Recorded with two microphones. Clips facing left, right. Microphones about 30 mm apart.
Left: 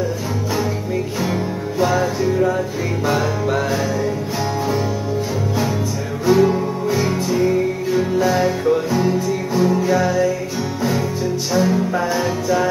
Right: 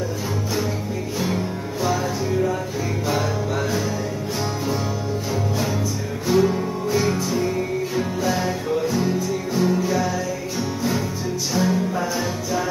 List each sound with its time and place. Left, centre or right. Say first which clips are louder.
1.8 s music: left 5 dB; left
6.2 s music: left 4 dB; centre
9.8 s music: left 5 dB; left
11.5 s music: left 4 dB; centre